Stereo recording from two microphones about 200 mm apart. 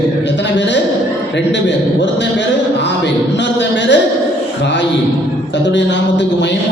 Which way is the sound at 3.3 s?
60° left (ahead or behind).